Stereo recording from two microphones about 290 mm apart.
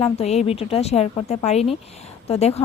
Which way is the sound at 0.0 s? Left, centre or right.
Left.